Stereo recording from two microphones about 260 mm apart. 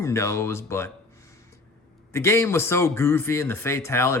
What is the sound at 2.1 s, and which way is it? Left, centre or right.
Speech, centre.